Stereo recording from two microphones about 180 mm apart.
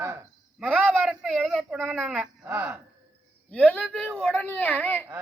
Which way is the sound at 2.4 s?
10° right (ahead or behind).